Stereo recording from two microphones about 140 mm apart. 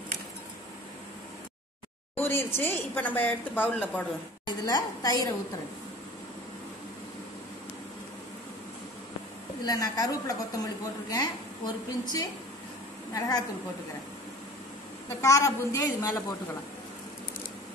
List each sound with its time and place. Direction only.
2.1 s a woman's voice: 15° left (ahead or behind)
4.5 s a woman's voice: 25° left (ahead or behind)
9.7 s a woman's voice: 25° left (ahead or behind)
15.2 s a woman's voice: 20° left (ahead or behind)